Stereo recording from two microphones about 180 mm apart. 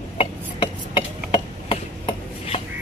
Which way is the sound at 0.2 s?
30° left (ahead or behind).